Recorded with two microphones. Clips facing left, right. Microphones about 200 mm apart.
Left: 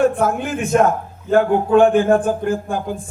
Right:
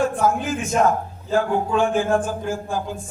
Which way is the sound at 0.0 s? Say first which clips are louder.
Left 4 dB; 60° left (ahead or behind).